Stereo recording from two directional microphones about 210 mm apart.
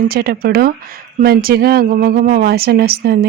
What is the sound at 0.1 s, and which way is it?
Speech, 45° right (ahead or behind).